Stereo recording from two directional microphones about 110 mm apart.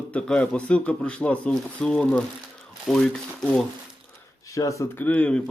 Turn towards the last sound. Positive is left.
turn(degrees=10)  # may be behind; listen again after turning